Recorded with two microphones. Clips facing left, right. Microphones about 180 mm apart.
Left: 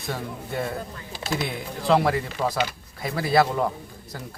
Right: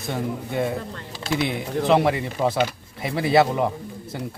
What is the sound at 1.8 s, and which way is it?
Speech, 20° right (ahead or behind).